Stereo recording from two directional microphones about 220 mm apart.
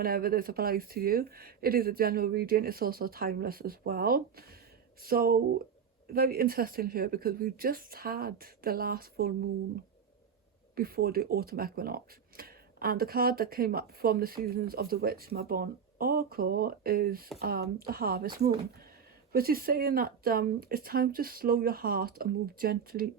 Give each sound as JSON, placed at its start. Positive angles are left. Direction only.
{"t": 0.0, "sound": "speech", "side_deg": -45}
{"t": 10.8, "sound": "speech", "side_deg": -45}